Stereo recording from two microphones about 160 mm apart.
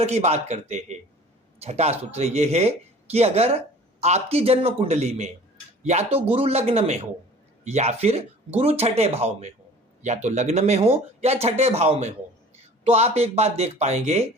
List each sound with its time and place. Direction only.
0.0 s speech: 45° right (ahead or behind)